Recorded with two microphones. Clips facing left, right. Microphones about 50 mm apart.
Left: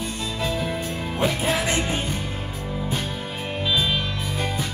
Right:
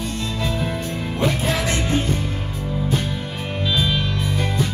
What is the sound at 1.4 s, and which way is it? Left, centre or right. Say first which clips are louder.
Music: right 1 dB; centre.